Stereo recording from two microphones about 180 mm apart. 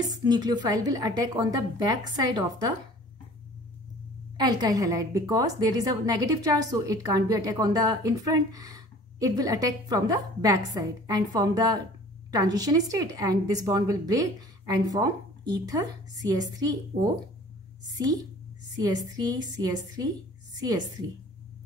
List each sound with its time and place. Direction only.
0.0 s a woman's voice: 20° right (ahead or behind)
4.4 s a woman's voice: 20° right (ahead or behind)
15.5 s a woman's voice: 20° right (ahead or behind)
18.8 s a woman's voice: 20° right (ahead or behind)